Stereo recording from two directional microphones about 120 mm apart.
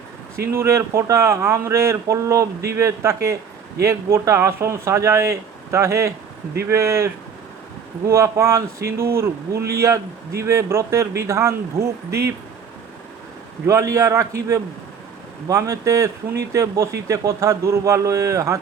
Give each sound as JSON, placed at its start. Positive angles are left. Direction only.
{"t": 0.5, "sound": "speech", "side_deg": -20}
{"t": 13.7, "sound": "speech", "side_deg": -25}